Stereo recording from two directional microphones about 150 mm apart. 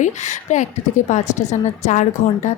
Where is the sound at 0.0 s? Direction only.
55° left (ahead or behind).